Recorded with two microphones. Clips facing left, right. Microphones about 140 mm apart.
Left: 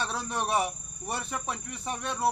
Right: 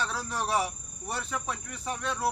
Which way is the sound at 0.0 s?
20° left (ahead or behind).